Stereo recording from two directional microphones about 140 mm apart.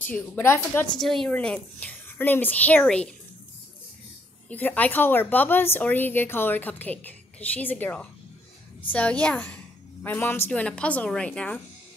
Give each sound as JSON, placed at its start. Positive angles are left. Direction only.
{"t": 0.1, "sound": "speech", "side_deg": 15}
{"t": 0.9, "sound": "speech", "side_deg": 0}
{"t": 4.5, "sound": "speech", "side_deg": 10}